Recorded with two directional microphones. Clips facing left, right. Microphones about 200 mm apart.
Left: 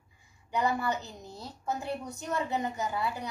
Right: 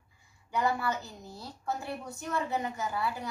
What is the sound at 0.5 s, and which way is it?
A woman's voice, 20° left (ahead or behind).